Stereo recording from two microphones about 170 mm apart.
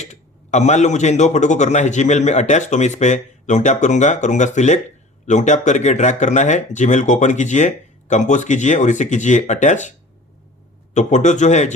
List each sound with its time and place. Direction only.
0.0 s a man's voice: 45° left (ahead or behind)
10.9 s a man's voice: 45° left (ahead or behind)